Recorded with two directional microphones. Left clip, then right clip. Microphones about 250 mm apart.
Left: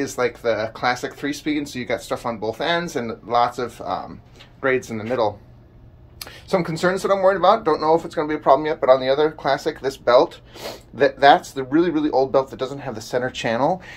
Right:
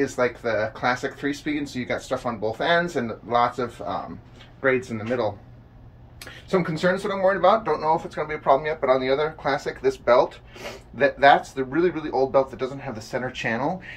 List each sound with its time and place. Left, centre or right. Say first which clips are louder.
0.0 s speech: left 2 dB; centre
6.5 s speech: left 2 dB; centre